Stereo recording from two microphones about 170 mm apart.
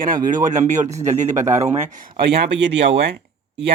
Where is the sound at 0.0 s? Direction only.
50° right (ahead or behind).